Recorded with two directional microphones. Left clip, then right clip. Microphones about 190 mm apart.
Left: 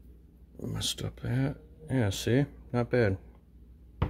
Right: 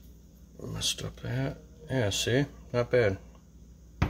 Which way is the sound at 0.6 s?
40° left (ahead or behind).